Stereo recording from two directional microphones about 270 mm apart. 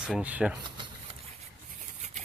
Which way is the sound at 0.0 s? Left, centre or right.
Centre.